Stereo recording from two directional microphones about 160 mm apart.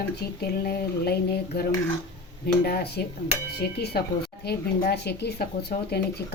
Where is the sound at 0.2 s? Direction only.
75° left (ahead or behind).